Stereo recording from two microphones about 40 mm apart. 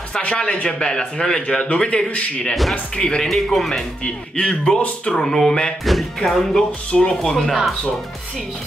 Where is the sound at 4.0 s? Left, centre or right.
Left.